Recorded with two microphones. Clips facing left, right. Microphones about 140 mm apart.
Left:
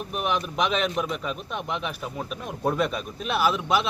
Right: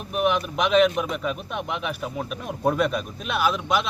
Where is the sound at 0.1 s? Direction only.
5° right (ahead or behind).